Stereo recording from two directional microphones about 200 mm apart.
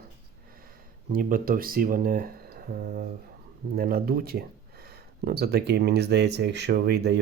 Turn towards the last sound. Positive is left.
turn(degrees=-55)  # may be behind; listen again after turning